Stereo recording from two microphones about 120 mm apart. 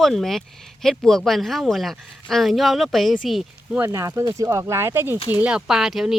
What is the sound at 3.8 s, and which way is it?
Speech, 25° right (ahead or behind).